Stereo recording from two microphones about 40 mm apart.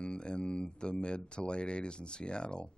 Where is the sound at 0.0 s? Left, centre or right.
Left.